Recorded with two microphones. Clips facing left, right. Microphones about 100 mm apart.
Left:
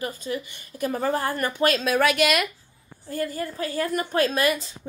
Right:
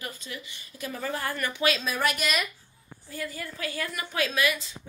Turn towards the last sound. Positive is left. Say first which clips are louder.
# left 4 dB
turn(degrees=40)  # may be behind; listen again after turning